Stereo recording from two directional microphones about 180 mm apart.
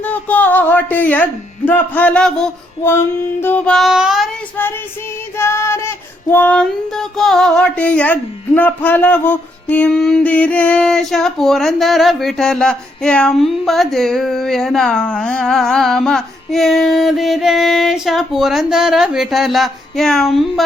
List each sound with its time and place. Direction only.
0.0 s speech: 10° left (ahead or behind)
5.4 s a sound: 15° left (ahead or behind)
6.3 s music: 10° left (ahead or behind)